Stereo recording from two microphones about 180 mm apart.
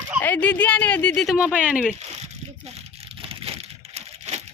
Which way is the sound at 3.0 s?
35° right (ahead or behind).